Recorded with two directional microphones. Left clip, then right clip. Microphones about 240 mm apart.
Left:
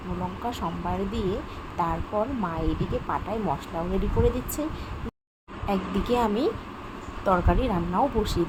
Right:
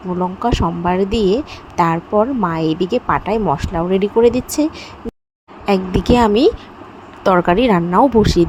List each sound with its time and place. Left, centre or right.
0.4 s speech: right